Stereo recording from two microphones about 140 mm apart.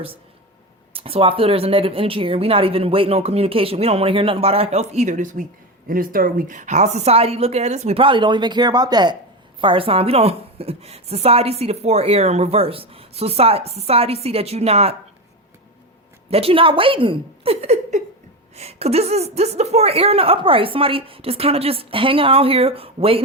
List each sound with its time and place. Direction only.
0.9 s a woman's voice: 40° right (ahead or behind); by 5.5 s 65° right (ahead or behind)
5.9 s a woman's voice: 90° right; by 14.9 s 45° right (ahead or behind)
16.3 s a woman's voice: 40° right (ahead or behind)